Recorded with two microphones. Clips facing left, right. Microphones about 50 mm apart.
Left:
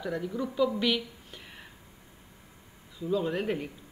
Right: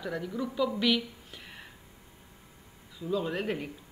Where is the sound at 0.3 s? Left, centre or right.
Centre.